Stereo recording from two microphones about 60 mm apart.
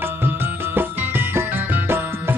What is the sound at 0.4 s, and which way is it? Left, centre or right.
Music, right.